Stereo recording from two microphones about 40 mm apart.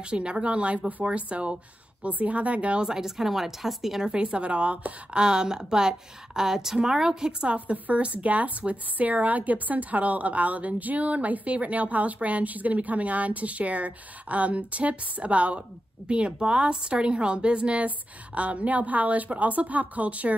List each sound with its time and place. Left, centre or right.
0.0 s a woman's voice: right
2.8 s a woman's voice: centre
4.0 s a woman's voice: right
7.5 s a woman's voice: right